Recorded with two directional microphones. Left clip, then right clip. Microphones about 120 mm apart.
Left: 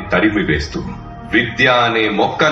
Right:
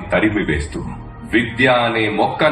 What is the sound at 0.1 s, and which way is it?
A man's voice, 40° right (ahead or behind).